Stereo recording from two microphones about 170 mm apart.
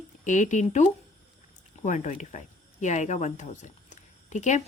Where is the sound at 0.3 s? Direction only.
45° left (ahead or behind).